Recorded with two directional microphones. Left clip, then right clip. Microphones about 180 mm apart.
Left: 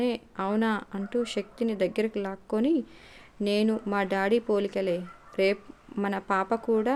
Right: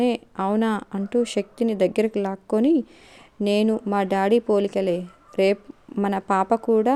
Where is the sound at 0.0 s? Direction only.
45° right (ahead or behind).